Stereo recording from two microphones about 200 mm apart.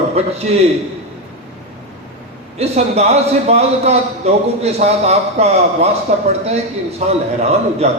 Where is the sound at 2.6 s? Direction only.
30° right (ahead or behind).